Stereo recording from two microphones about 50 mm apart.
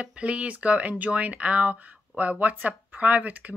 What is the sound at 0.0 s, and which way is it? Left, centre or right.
Speech, right.